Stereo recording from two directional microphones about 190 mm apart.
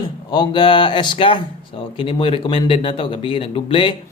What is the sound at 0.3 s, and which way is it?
A man's voice, 25° left (ahead or behind).